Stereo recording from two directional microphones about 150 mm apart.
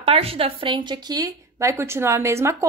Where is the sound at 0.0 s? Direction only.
40° right (ahead or behind).